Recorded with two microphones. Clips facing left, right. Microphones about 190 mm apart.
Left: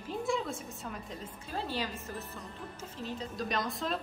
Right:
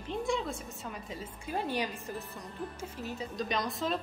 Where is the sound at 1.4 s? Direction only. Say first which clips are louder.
Right 3 dB; 15° right (ahead or behind).